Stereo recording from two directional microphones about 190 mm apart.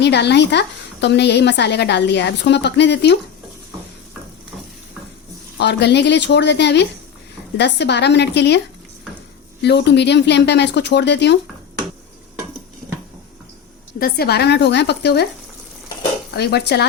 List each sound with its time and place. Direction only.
0.0 s a woman's voice: 65° left (ahead or behind)
5.5 s a woman's voice: 65° left (ahead or behind)
14.0 s a woman's voice: 55° left (ahead or behind)
16.3 s a woman's voice: 60° left (ahead or behind)